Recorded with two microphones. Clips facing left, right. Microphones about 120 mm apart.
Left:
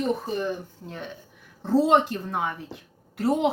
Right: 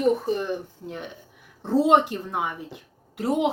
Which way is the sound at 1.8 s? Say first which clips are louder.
Right 1 dB; 20° right (ahead or behind).